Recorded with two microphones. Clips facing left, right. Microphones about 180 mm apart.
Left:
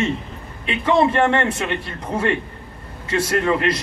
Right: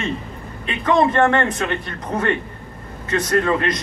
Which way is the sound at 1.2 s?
25° left (ahead or behind).